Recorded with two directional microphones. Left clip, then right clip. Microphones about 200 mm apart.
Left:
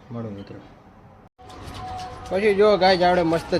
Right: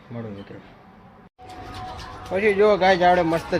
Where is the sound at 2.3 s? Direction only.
10° left (ahead or behind).